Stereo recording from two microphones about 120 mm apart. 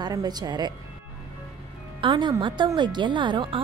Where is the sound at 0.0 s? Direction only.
35° right (ahead or behind).